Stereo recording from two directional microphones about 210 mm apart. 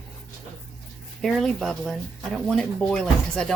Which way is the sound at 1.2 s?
Centre (ahead or behind).